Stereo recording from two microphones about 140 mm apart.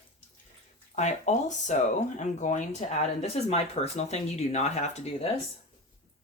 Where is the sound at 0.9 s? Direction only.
55° left (ahead or behind).